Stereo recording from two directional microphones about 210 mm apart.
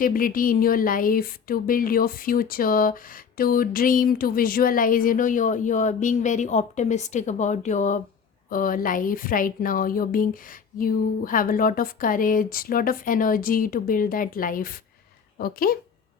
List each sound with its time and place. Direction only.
0.0 s speech: 40° left (ahead or behind)